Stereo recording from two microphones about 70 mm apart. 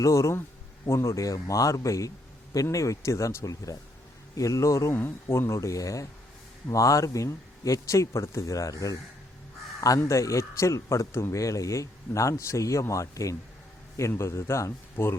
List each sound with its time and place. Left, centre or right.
0.0 s a man's voice: left
4.9 s speech: left
10.0 s speech: left
14.1 s speech: left